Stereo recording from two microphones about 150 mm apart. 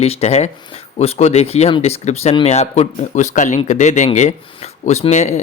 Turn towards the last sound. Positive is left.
turn(degrees=50)  # may be behind; listen again after turning